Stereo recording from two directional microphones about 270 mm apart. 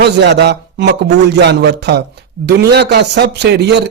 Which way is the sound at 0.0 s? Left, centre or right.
Right.